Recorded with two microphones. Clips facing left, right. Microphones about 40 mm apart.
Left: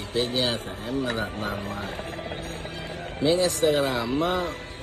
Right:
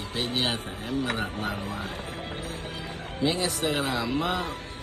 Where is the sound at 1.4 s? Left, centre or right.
Left.